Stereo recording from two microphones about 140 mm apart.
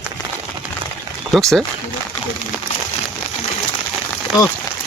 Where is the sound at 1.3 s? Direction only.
5° left (ahead or behind).